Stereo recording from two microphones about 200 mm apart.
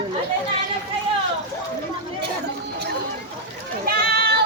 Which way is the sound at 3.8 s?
50° right (ahead or behind).